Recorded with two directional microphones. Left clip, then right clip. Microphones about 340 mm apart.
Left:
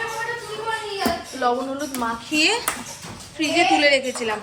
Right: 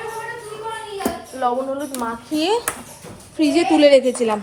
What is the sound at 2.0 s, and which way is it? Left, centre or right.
A woman's voice, centre.